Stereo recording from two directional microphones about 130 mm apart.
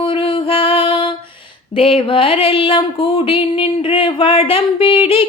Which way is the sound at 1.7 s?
50° left (ahead or behind).